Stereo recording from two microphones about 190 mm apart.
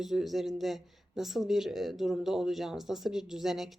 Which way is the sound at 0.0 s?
Centre (ahead or behind).